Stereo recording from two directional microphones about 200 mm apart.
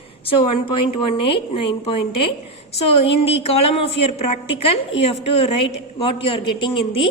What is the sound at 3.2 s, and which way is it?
A woman's voice, 30° left (ahead or behind).